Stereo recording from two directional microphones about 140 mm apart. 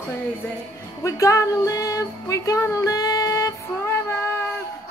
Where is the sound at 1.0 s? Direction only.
20° left (ahead or behind).